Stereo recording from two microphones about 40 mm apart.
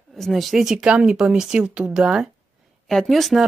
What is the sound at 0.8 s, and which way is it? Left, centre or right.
Speech, right.